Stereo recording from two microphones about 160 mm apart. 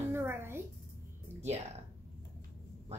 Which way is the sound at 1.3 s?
40° right (ahead or behind).